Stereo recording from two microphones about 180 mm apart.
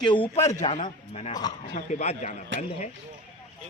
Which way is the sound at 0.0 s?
25° left (ahead or behind).